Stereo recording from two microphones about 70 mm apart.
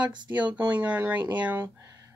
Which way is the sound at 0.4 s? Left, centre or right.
Right.